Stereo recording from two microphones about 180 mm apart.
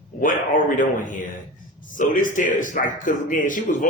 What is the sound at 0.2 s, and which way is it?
A man's voice, 50° left (ahead or behind).